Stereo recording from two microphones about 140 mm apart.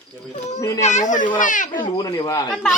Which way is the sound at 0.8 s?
60° left (ahead or behind).